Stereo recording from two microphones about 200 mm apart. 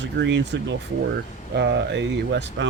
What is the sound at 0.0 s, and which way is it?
Speech, 65° right (ahead or behind).